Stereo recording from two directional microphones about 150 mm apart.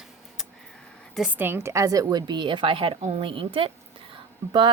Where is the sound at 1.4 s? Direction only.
15° right (ahead or behind).